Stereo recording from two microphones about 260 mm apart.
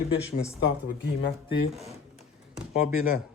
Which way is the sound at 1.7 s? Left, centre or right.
Centre.